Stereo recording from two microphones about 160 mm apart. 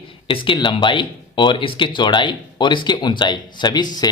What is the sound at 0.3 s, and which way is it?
Speech, 30° left (ahead or behind).